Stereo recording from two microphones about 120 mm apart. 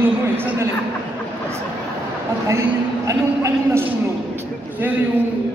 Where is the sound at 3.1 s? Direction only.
25° right (ahead or behind).